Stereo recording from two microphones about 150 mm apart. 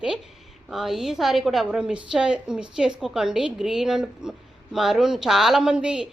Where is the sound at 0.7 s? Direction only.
5° right (ahead or behind).